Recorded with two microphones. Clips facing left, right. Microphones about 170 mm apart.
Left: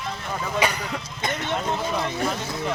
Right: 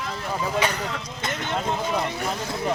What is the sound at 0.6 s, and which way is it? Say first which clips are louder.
Speech: left 4 dB; 10° left (ahead or behind).